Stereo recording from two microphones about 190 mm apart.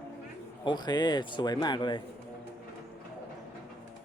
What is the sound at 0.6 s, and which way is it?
A man's voice, 20° left (ahead or behind).